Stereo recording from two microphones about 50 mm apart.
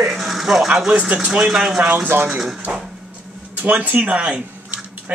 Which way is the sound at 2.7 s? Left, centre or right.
Right.